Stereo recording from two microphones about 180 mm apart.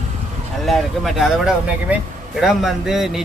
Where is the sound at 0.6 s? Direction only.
Centre (ahead or behind).